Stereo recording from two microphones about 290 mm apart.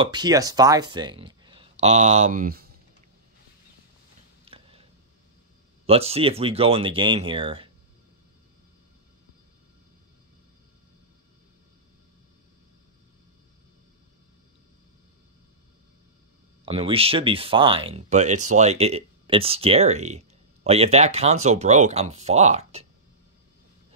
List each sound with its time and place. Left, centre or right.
0.0 s speech: centre; by 2.8 s right
4.5 s a sound: centre
5.9 s speech: centre
16.6 s speech: centre